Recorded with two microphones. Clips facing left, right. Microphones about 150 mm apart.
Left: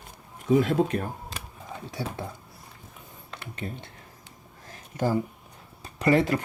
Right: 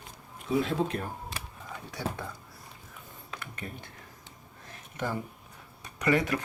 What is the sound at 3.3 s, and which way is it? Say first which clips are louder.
Speech: left 5 dB; 25° left (ahead or behind).